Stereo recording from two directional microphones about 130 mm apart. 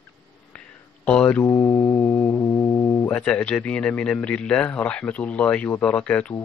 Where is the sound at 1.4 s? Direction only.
20° left (ahead or behind).